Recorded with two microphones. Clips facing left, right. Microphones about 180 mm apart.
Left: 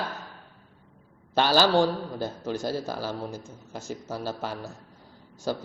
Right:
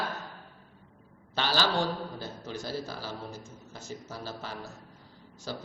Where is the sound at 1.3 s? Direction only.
45° left (ahead or behind).